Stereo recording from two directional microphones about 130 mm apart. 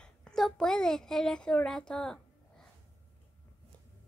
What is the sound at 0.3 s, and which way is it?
A child's voice, 5° left (ahead or behind).